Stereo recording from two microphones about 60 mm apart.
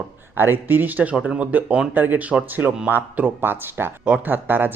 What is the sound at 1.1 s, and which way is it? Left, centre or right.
Speech, centre.